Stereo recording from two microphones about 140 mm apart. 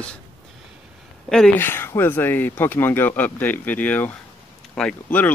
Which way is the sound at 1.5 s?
15° left (ahead or behind).